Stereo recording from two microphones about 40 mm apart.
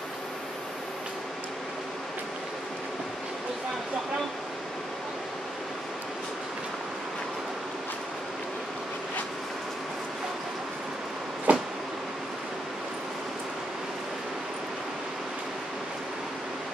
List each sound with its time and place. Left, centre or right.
11.5 s vehicle: right